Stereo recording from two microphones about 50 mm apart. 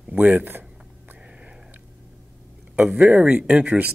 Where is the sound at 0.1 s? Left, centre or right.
Right.